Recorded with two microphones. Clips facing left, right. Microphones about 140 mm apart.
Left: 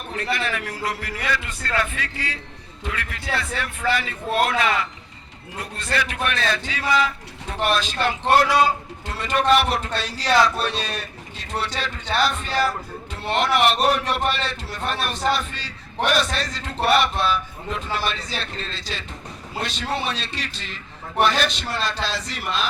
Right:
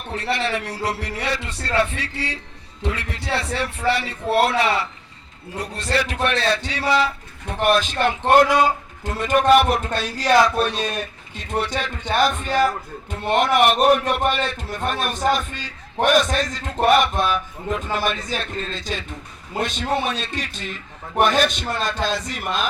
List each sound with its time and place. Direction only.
0.3 s a man's voice: 30° right (ahead or behind)
7.6 s a man's voice: 50° right (ahead or behind)
7.9 s speech: 15° right (ahead or behind)
8.3 s a man's voice: 50° right (ahead or behind)
10.6 s speech: 15° right (ahead or behind)
10.9 s a man's voice: 50° right (ahead or behind)